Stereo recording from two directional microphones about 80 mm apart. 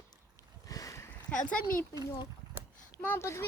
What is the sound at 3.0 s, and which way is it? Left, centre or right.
Speech, left.